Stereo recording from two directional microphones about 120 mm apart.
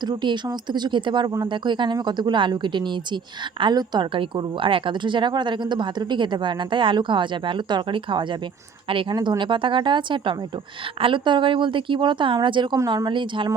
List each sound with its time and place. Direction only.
0.0 s a woman's voice: 40° right (ahead or behind)
9.1 s a woman's voice: 35° right (ahead or behind)